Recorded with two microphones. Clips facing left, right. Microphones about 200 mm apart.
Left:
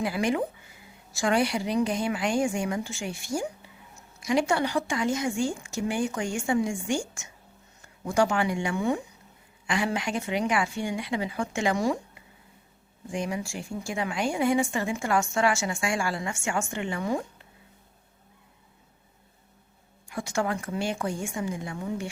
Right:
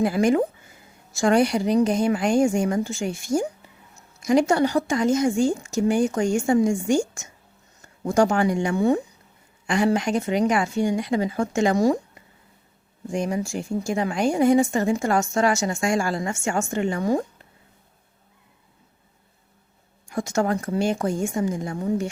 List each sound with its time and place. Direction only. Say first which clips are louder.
0.0 s a woman's voice: right 7 dB; 45° right (ahead or behind)
20.1 s a woman's voice: right 5 dB; 40° right (ahead or behind)